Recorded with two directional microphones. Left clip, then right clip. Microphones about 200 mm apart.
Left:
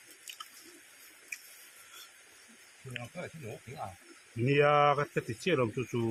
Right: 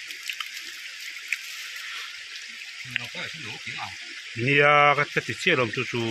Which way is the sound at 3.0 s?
10° right (ahead or behind).